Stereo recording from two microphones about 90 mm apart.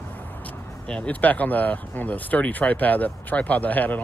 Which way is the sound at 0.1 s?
20° left (ahead or behind).